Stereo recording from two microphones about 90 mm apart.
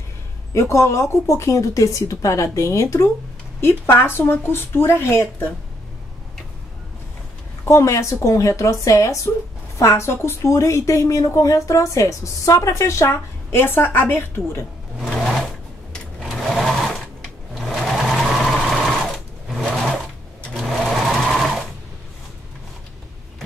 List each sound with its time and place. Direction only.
0.5 s a woman's voice: 35° left (ahead or behind)
7.6 s a woman's voice: 35° left (ahead or behind)
15.0 s a sound: 5° left (ahead or behind)
16.2 s sewing machine: centre (ahead or behind)